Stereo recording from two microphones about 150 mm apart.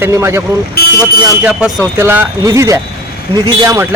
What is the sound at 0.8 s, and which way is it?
Vehicle, 90° left.